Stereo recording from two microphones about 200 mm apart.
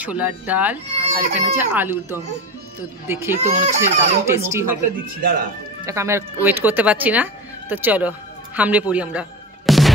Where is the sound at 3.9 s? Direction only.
35° right (ahead or behind).